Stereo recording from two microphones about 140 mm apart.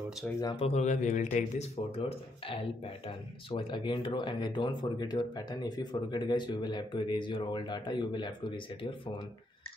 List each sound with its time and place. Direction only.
0.6 s speech: 50° left (ahead or behind); by 9.1 s 35° left (ahead or behind)